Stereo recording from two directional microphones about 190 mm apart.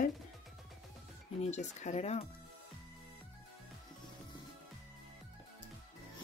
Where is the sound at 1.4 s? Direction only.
40° left (ahead or behind).